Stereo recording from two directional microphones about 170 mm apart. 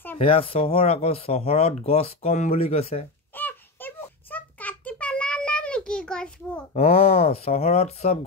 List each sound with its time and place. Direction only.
0.2 s speech: 35° left (ahead or behind)
3.3 s a sound: 10° left (ahead or behind)
6.7 s speech: 35° left (ahead or behind)